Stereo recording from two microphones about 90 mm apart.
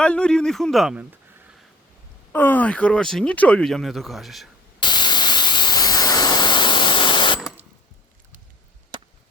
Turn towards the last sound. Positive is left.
turn(degrees=60)  # may be behind; listen again after turning